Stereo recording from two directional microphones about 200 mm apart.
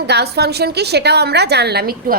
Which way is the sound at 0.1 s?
55° right (ahead or behind).